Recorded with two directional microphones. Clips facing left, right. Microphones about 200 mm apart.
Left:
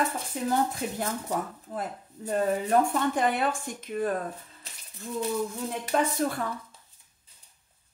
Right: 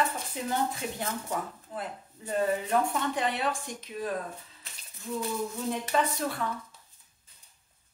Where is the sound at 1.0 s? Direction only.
40° left (ahead or behind).